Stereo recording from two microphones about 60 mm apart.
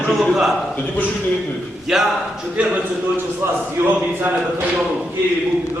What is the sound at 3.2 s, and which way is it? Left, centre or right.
Speech, right.